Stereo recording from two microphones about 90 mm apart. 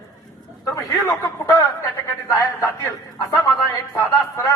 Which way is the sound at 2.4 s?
30° left (ahead or behind).